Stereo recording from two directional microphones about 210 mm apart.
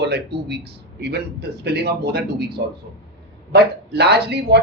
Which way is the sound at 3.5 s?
50° right (ahead or behind).